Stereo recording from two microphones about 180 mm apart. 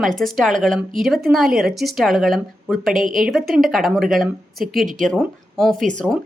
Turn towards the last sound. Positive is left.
turn(degrees=-45)  # may be behind; listen again after turning